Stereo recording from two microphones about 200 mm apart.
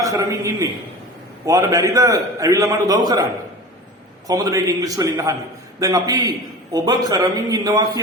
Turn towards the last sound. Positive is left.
turn(degrees=-20)  # may be behind; listen again after turning